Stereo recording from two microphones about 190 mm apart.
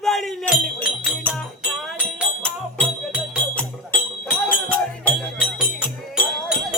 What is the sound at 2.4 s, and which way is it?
Music, 5° left (ahead or behind).